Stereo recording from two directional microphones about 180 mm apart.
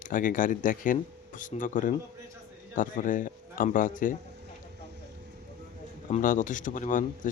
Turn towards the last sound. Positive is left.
turn(degrees=45)  # may be behind; listen again after turning